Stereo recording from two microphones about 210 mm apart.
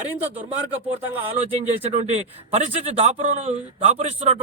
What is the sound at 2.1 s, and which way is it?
A man's voice, 30° right (ahead or behind).